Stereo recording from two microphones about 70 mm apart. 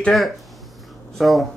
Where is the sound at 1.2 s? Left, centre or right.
Centre.